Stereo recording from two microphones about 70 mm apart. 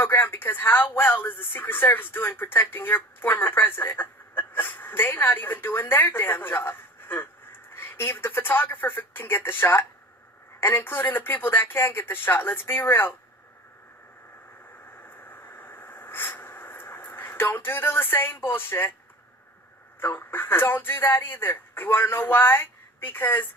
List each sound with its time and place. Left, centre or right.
0.0 s speech: left
14.9 s a sound: left
20.0 s speech: left